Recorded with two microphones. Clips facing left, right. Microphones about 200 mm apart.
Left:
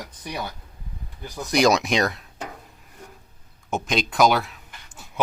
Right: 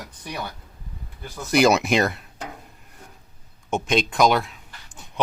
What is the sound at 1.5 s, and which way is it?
Speech, 5° right (ahead or behind).